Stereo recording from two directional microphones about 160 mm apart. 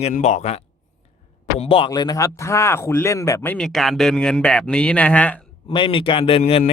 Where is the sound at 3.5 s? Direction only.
5° left (ahead or behind).